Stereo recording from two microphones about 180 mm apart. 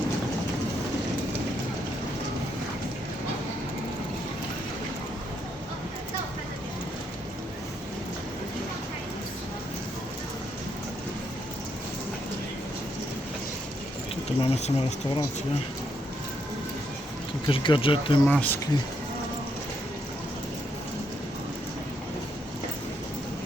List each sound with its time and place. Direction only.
14.4 s speech: 35° left (ahead or behind)
17.5 s speech: 30° left (ahead or behind)
18.3 s speech: 10° left (ahead or behind)